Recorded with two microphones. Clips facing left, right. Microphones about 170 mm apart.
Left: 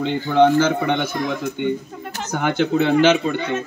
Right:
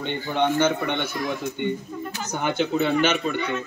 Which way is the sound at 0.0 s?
90° left.